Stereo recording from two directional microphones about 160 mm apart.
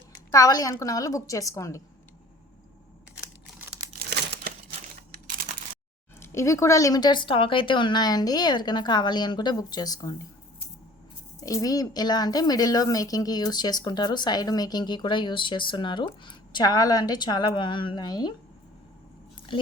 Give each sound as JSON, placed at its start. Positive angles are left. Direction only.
{"t": 0.3, "sound": "a woman's voice", "side_deg": 20}
{"t": 4.1, "sound": "crumpling", "side_deg": -90}
{"t": 6.1, "sound": "a woman's voice", "side_deg": 15}
{"t": 11.3, "sound": "a woman's voice", "side_deg": 20}